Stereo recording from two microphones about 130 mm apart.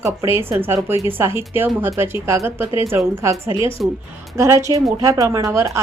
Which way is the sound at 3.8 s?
Centre (ahead or behind).